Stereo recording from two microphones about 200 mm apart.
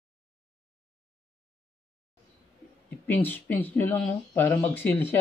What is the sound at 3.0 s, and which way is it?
Speech, 10° left (ahead or behind).